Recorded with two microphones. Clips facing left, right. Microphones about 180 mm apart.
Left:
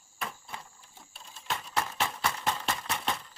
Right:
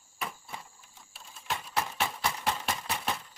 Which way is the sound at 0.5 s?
5° right (ahead or behind).